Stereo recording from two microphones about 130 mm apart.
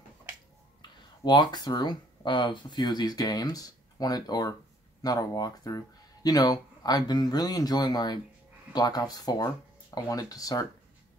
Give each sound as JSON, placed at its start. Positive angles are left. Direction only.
{"t": 0.8, "sound": "speech", "side_deg": 35}